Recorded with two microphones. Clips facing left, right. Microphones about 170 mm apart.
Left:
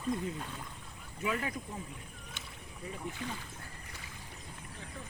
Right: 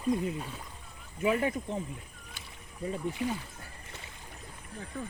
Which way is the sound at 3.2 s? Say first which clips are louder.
Right 9 dB; 10° right (ahead or behind).